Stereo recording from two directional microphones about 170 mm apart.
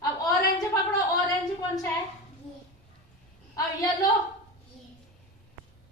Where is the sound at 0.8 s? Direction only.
20° left (ahead or behind).